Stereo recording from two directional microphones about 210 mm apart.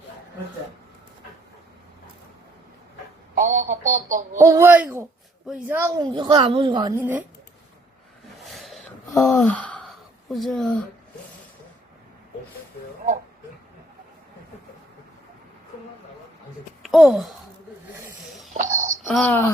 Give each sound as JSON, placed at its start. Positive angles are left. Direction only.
{"t": 3.3, "sound": "a sound", "side_deg": -40}
{"t": 4.4, "sound": "a woman's voice", "side_deg": -15}
{"t": 8.5, "sound": "a sound", "side_deg": 0}
{"t": 16.8, "sound": "speech", "side_deg": 0}
{"t": 18.5, "sound": "wail", "side_deg": -35}
{"t": 19.0, "sound": "speech", "side_deg": 5}